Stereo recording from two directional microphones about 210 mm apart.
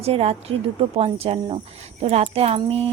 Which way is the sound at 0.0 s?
30° right (ahead or behind).